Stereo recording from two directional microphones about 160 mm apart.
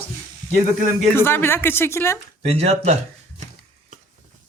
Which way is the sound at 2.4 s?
40° right (ahead or behind).